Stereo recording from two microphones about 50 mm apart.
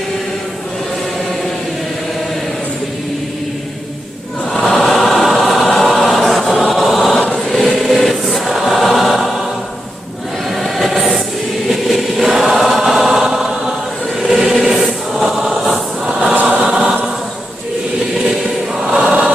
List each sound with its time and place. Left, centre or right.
4.5 s choir: centre
10.5 s train: centre
11.7 s vehicle: centre
12.4 s choir: centre
14.2 s a sound: centre
15.2 s choir: centre
16.3 s choir: right
16.6 s choir: centre
18.9 s choir: centre